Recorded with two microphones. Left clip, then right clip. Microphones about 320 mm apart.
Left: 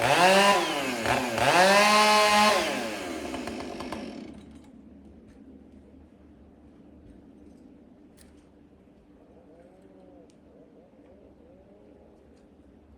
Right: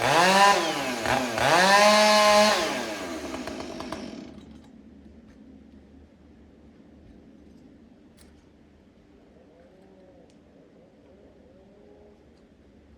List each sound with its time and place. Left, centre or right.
0.0 s chainsaw: centre